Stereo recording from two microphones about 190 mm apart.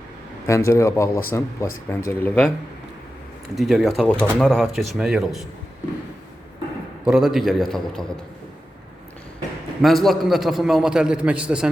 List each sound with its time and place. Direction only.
0.4 s speech: 15° left (ahead or behind)
3.5 s speech: centre (ahead or behind)
7.0 s speech: 5° right (ahead or behind)
9.8 s speech: centre (ahead or behind)